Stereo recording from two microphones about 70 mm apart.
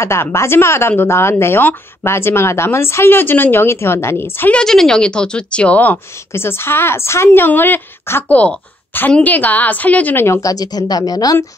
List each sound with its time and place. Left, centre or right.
0.0 s a woman's voice: left
4.5 s a woman's voice: centre
6.3 s a woman's voice: left
7.2 s a woman's voice: left
8.3 s a woman's voice: centre
10.1 s a woman's voice: left
10.4 s speech: left